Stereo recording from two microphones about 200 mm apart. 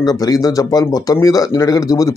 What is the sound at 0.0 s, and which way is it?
Speech, 20° left (ahead or behind).